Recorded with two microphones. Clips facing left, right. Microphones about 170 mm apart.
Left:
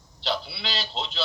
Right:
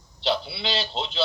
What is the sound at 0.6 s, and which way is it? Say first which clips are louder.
Speech: right 5 dB; 25° right (ahead or behind).